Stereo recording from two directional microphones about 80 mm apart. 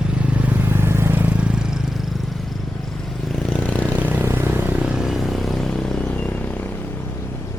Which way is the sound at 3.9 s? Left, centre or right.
Right.